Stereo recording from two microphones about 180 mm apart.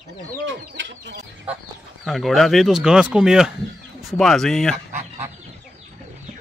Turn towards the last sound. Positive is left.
turn(degrees=0)  # may be behind; listen again after turning